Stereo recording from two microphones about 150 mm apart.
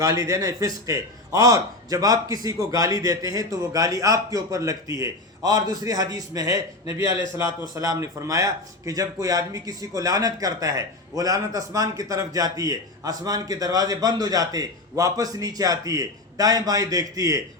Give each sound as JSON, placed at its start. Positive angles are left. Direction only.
{"t": 0.0, "sound": "speech", "side_deg": -20}